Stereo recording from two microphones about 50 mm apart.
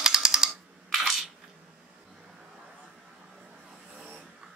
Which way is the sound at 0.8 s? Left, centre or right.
Centre.